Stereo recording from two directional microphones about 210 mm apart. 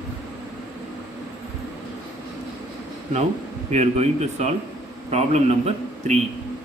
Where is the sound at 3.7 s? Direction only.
30° right (ahead or behind).